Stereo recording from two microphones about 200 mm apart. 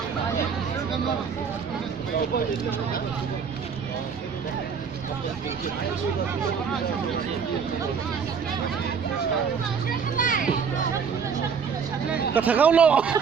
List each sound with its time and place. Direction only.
10.2 s a child's voice: 40° left (ahead or behind)
12.3 s speech: 10° right (ahead or behind)